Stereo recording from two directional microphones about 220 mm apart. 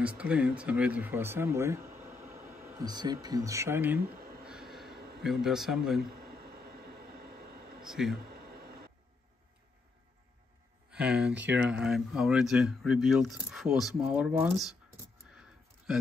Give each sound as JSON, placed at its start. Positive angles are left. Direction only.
{"t": 0.0, "sound": "speech", "side_deg": -5}
{"t": 4.5, "sound": "vehicle", "side_deg": 0}
{"t": 4.9, "sound": "a sound", "side_deg": -45}
{"t": 5.2, "sound": "speech", "side_deg": 0}
{"t": 5.9, "sound": "train", "side_deg": -45}
{"t": 7.8, "sound": "speech", "side_deg": 0}
{"t": 8.2, "sound": "a sound", "side_deg": -45}
{"t": 10.9, "sound": "speech", "side_deg": -5}
{"t": 15.9, "sound": "speech", "side_deg": 0}